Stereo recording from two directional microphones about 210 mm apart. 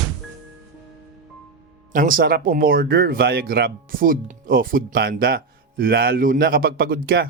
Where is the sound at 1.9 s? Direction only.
40° right (ahead or behind).